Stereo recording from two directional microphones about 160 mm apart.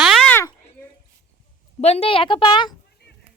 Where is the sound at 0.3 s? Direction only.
15° left (ahead or behind).